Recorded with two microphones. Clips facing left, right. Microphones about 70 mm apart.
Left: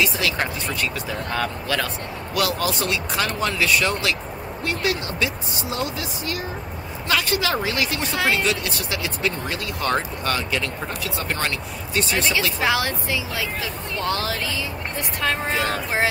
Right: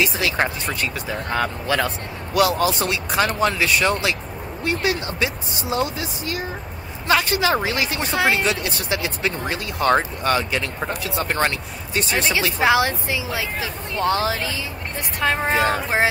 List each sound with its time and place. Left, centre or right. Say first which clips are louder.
0.0 s speech: right 2 dB; right